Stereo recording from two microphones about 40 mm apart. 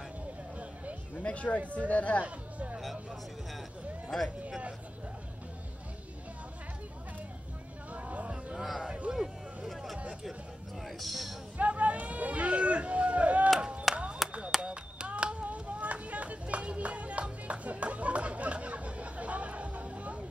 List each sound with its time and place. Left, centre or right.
1.2 s speech: left
2.2 s speech: right
7.9 s hubbub: right
8.5 s a man's voice: centre
9.1 s a sound: centre
9.7 s a sound: centre
10.9 s a man's voice: centre
11.5 s run: right
13.6 s a sound: right
14.2 s clapping: centre
14.6 s a sound: right
15.4 s run: right